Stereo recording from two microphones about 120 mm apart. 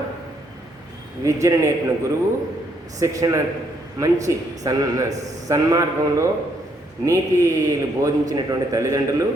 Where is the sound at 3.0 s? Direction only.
30° right (ahead or behind).